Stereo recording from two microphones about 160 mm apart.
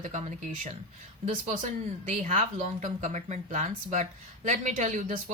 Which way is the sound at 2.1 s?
50° right (ahead or behind).